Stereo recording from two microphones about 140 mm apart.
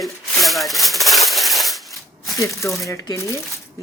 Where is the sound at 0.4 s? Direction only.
Centre (ahead or behind).